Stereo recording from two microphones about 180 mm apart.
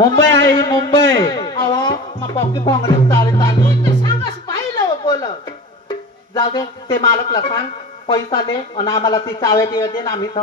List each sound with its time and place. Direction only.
0.0 s a man's voice: 20° left (ahead or behind)
5.0 s a sound: 25° left (ahead or behind)
6.3 s speech: 20° left (ahead or behind)